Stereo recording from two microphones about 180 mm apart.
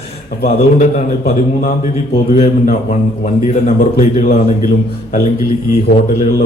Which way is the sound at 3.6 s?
55° left (ahead or behind).